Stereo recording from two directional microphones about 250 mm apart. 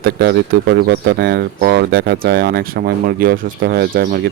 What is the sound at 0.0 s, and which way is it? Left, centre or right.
Speech, right.